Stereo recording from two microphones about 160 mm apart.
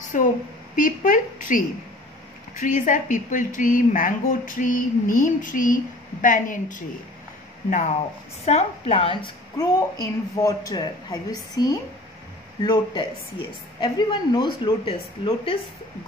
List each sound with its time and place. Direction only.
0.1 s a woman's voice: 55° left (ahead or behind)
2.6 s speech: 55° left (ahead or behind)
8.5 s a woman's voice: 40° left (ahead or behind); by 11.6 s 25° left (ahead or behind)
12.6 s a woman's voice: 30° left (ahead or behind)